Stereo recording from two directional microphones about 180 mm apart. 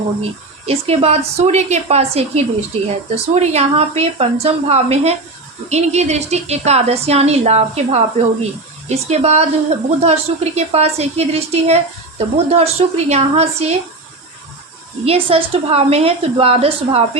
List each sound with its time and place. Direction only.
0.2 s a woman's voice: 35° right (ahead or behind)
15.0 s a woman's voice: 30° right (ahead or behind)